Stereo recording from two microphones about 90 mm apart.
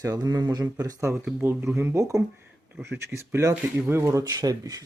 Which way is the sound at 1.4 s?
25° right (ahead or behind).